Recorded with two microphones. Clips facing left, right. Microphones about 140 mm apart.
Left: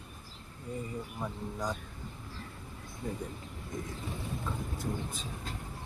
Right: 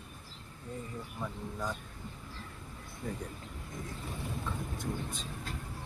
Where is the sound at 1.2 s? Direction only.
15° left (ahead or behind).